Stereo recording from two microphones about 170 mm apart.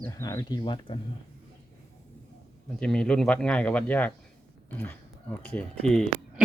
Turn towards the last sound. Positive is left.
turn(degrees=5)  # may be behind; listen again after turning